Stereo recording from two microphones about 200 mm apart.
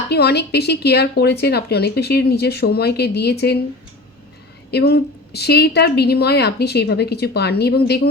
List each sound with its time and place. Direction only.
0.1 s speech: 55° left (ahead or behind)
4.7 s speech: 50° left (ahead or behind)